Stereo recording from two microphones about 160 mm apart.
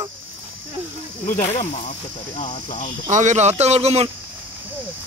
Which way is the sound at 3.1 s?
50° right (ahead or behind).